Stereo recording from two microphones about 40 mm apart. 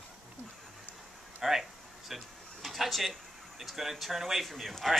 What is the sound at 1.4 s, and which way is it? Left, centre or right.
Speech, centre.